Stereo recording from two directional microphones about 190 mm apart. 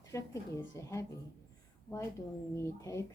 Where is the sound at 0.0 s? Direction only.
15° left (ahead or behind).